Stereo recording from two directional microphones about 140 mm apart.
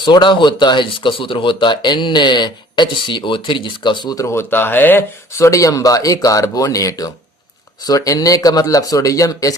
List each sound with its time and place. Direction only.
0.0 s a man's voice: 35° left (ahead or behind)